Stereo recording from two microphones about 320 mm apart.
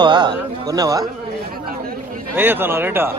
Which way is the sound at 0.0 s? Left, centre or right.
Centre.